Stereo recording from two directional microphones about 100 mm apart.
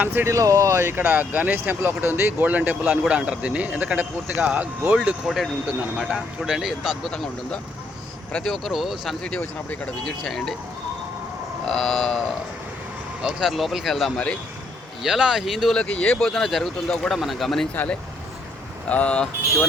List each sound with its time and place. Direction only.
0.0 s speech: 20° right (ahead or behind)
0.3 s speech: 30° right (ahead or behind); by 4.7 s 15° right (ahead or behind)
5.0 s speech: 5° right (ahead or behind)
8.4 s speech: centre (ahead or behind)
9.4 s speech: 15° left (ahead or behind)
11.7 s speech: 5° left (ahead or behind)
13.2 s speech: 5° right (ahead or behind)
15.8 s speech: 10° left (ahead or behind)
18.9 s speech: 15° left (ahead or behind)